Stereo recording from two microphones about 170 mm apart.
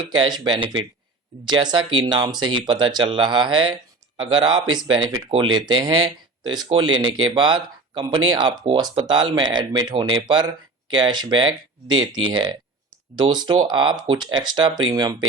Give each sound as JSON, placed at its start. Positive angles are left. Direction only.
{"t": 0.0, "sound": "speech", "side_deg": -25}